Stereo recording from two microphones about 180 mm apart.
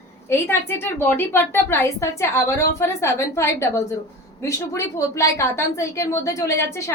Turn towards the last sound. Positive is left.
turn(degrees=15)  # may be behind; listen again after turning